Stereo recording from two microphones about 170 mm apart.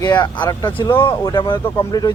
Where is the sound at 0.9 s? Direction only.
15° left (ahead or behind).